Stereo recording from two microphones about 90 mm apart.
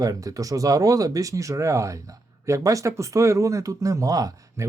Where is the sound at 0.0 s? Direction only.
40° right (ahead or behind).